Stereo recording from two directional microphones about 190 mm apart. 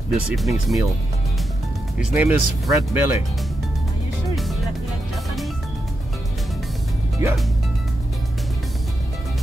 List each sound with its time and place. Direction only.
0.3 s speech: centre (ahead or behind)
2.0 s speech: 5° right (ahead or behind)
7.2 s speech: 15° right (ahead or behind)